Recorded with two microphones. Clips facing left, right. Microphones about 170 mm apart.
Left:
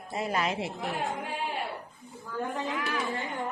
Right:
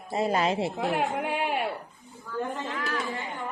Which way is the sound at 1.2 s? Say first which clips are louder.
Right 6 dB; 70° right (ahead or behind).